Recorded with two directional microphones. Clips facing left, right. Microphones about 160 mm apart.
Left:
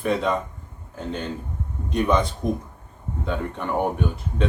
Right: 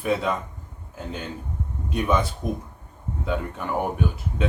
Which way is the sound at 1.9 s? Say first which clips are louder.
Left 2 dB; 5° right (ahead or behind).